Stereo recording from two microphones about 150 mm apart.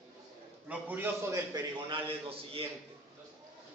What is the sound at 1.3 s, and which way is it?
A man's voice, 30° right (ahead or behind).